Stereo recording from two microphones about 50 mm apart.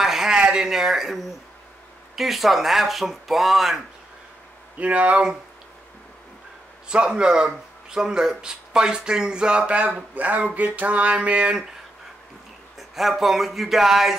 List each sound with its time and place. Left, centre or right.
0.0 s a sound: centre
0.4 s speech: centre
4.7 s speech: right
6.9 s speech: centre
12.7 s speech: centre